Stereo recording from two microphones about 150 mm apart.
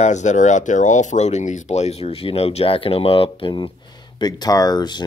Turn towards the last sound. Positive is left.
turn(degrees=30)  # may be behind; listen again after turning